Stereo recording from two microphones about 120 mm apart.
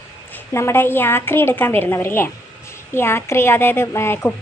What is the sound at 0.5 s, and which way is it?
A woman's voice, 20° left (ahead or behind).